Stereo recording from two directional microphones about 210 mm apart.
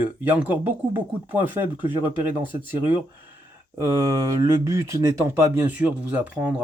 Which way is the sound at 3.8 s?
15° right (ahead or behind).